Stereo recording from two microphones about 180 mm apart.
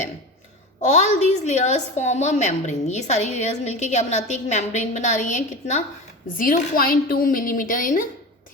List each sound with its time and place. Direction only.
0.9 s a woman's voice: 40° left (ahead or behind)